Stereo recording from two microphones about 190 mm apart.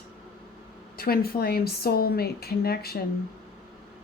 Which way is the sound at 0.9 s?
50° left (ahead or behind).